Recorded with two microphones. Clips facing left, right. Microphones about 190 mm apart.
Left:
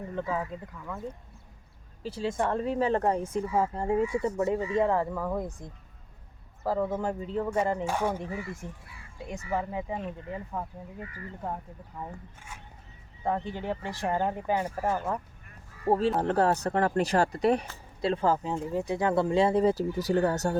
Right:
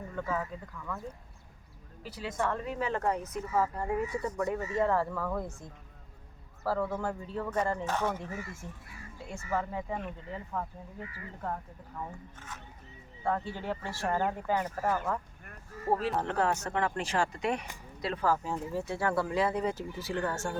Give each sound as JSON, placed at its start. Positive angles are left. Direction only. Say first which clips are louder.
{"t": 0.2, "sound": "speech", "louder": "left 2 dB", "side_deg": 20}
{"t": 2.0, "sound": "speech", "louder": "left 4 dB", "side_deg": 25}
{"t": 11.0, "sound": "speech", "louder": "left 1 dB", "side_deg": 40}
{"t": 13.2, "sound": "speech", "louder": "left 2 dB", "side_deg": 20}